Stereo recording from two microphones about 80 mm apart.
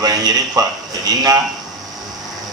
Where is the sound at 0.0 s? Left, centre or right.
Right.